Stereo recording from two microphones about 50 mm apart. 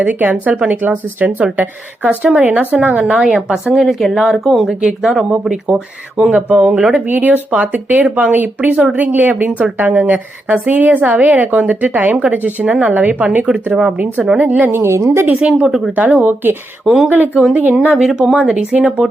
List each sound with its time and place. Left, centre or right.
0.0 s a woman's voice: right
3.2 s speech: centre
4.7 s speech: centre
7.1 s a woman's voice: right
12.6 s a woman's voice: right
14.7 s a woman's voice: right
15.3 s speech: right
16.2 s a woman's voice: right
16.8 s speech: centre
17.1 s a woman's voice: right
17.9 s speech: centre
18.3 s speech: right